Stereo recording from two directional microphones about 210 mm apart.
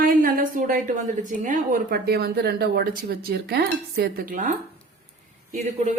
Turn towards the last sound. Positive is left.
turn(degrees=-35)  # may be behind; listen again after turning